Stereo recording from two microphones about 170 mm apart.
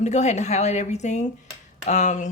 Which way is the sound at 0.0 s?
45° left (ahead or behind).